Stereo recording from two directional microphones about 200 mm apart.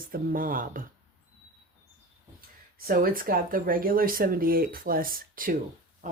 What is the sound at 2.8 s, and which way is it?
Speech, 45° right (ahead or behind).